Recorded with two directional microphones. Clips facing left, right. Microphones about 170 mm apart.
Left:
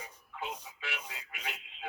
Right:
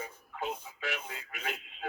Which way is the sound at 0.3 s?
45° right (ahead or behind).